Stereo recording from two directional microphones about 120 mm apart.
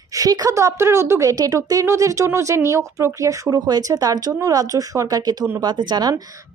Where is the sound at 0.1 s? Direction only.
30° right (ahead or behind).